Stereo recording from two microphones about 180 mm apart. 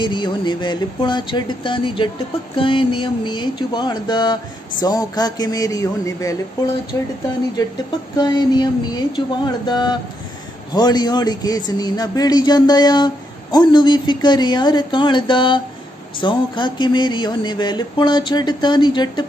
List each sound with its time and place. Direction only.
0.0 s speech: 25° left (ahead or behind)
7.6 s speech: 20° left (ahead or behind)